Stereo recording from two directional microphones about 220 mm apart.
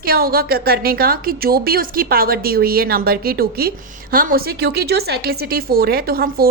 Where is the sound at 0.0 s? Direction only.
45° right (ahead or behind).